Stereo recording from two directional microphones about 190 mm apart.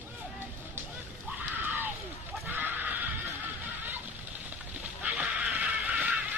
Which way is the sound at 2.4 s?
10° right (ahead or behind).